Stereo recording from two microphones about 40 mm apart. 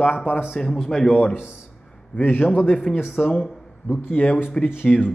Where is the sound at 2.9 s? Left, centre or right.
Left.